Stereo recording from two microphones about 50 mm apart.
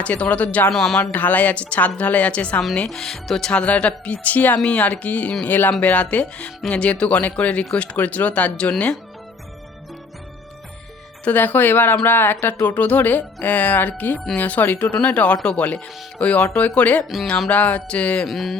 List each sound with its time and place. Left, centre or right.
0.0 s speech: left
0.7 s speech: centre
1.1 s speech: left
2.9 s speech: centre
3.5 s speech: left
11.3 s speech: left
18.3 s speech: centre